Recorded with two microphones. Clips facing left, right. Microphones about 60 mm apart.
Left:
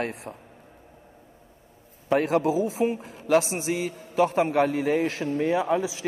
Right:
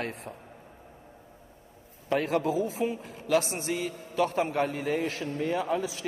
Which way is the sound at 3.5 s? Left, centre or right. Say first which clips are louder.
Left 4 dB; left.